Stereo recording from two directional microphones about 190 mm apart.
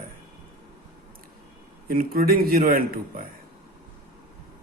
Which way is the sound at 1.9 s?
50° right (ahead or behind).